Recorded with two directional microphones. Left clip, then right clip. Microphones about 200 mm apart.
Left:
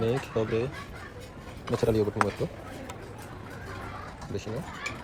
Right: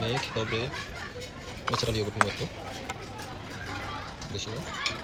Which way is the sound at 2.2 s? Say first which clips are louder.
Right 5 dB; centre (ahead or behind).